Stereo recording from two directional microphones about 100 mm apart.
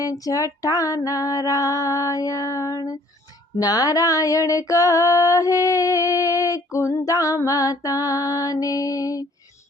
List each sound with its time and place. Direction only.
0.0 s female singing: 35° left (ahead or behind)